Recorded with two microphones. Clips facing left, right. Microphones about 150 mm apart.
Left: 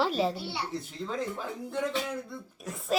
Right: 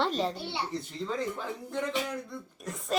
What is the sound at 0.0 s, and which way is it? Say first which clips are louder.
Speech: left 2 dB; 5° left (ahead or behind).